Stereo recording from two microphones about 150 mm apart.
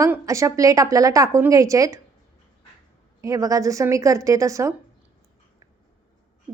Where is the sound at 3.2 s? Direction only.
20° right (ahead or behind).